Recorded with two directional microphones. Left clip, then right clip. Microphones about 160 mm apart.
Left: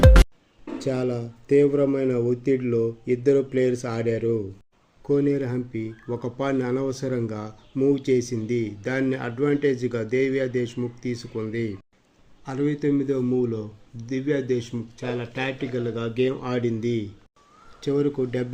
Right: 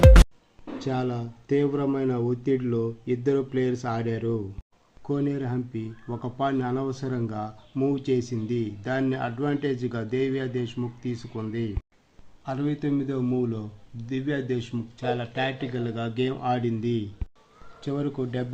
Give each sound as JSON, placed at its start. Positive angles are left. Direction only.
{"t": 0.8, "sound": "a man's voice", "side_deg": 10}
{"t": 12.5, "sound": "a man's voice", "side_deg": 5}